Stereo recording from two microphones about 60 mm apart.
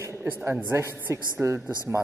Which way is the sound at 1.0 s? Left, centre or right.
Right.